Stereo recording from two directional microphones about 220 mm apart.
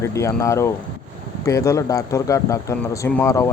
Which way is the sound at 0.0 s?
15° left (ahead or behind).